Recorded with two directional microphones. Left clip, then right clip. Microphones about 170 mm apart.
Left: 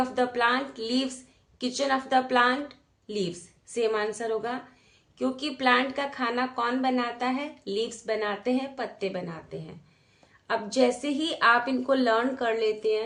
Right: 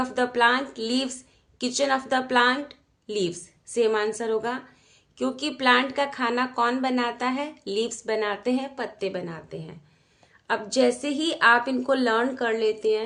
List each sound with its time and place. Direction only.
0.0 s a woman's voice: 35° right (ahead or behind)